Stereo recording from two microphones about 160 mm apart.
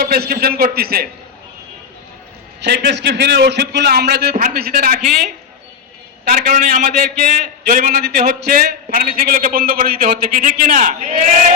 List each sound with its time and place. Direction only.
0.0 s a man's voice: 70° right (ahead or behind)
2.6 s a man's voice: 90° right; by 4.9 s 70° right (ahead or behind)
6.2 s a man's voice: 60° right (ahead or behind)